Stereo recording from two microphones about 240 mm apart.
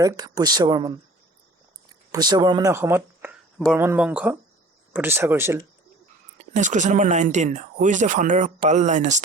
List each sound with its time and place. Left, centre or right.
0.0 s speech: centre
2.1 s speech: centre
6.4 s speech: right